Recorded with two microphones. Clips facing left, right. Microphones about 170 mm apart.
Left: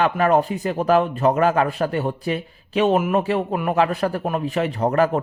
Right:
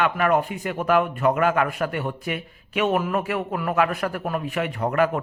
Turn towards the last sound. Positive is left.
turn(degrees=35)  # may be behind; listen again after turning